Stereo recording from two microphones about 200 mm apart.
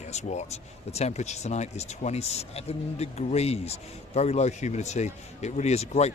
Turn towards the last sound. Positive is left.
turn(degrees=35)  # may be behind; listen again after turning